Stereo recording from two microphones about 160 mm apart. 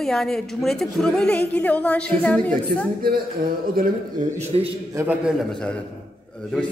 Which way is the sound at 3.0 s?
70° right (ahead or behind).